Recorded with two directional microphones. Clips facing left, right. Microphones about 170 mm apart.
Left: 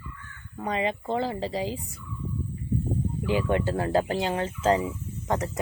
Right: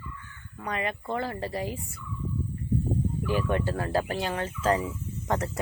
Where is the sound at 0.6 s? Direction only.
25° left (ahead or behind).